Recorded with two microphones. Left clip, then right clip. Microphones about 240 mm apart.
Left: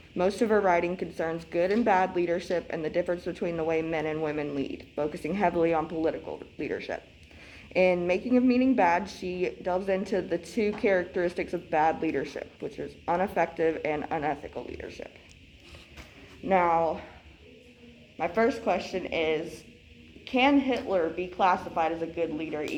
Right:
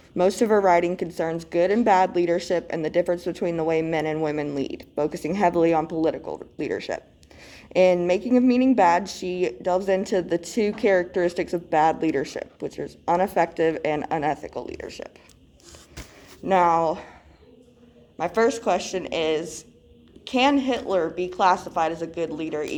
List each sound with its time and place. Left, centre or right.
0.2 s speech: right
16.5 s a woman's voice: right
18.2 s a woman's voice: right